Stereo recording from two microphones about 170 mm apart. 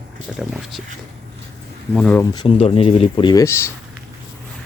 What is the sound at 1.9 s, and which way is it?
Speech, 10° left (ahead or behind).